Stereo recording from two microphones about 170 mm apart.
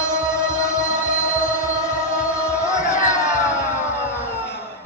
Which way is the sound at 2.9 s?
15° left (ahead or behind).